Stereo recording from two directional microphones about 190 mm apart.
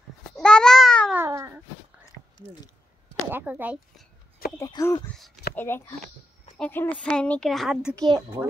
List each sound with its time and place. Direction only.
0.4 s babbling: 5° left (ahead or behind)
1.1 s a sound: 15° right (ahead or behind)
3.3 s speech: 10° right (ahead or behind)
4.6 s speech: 15° left (ahead or behind)
5.1 s speech: centre (ahead or behind)
5.6 s speech: 15° left (ahead or behind)
7.9 s a child's voice: 20° right (ahead or behind)